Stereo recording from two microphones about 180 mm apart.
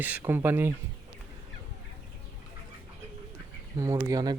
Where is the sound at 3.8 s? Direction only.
15° right (ahead or behind).